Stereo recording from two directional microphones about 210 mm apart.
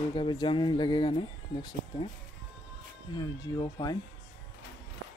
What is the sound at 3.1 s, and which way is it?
Speech, 20° left (ahead or behind).